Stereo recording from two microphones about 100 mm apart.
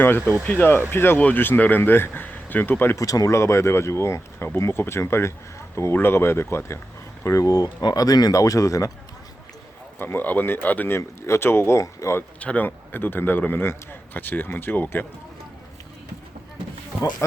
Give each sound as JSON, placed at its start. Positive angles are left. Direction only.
{"t": 0.4, "sound": "speech", "side_deg": 20}
{"t": 3.0, "sound": "speech", "side_deg": 35}
{"t": 10.0, "sound": "speech", "side_deg": 20}
{"t": 12.4, "sound": "speech", "side_deg": 15}